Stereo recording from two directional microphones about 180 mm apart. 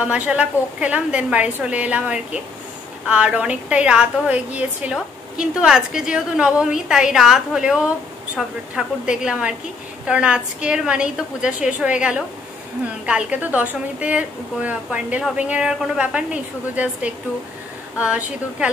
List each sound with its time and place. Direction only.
0.0 s a woman's voice: 5° right (ahead or behind)